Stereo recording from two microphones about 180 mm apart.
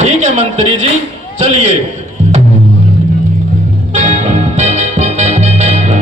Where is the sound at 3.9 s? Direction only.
40° right (ahead or behind).